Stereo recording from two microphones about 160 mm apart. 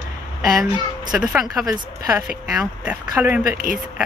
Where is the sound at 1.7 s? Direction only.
20° right (ahead or behind).